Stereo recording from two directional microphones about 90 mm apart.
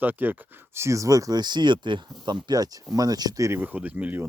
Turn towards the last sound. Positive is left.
turn(degrees=-20)  # may be behind; listen again after turning